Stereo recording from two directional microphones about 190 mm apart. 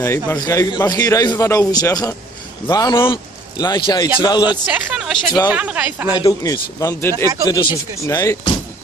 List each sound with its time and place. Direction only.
0.0 s a man's voice: 15° left (ahead or behind)
4.6 s speech: 10° right (ahead or behind)
6.1 s a man's voice: 20° left (ahead or behind)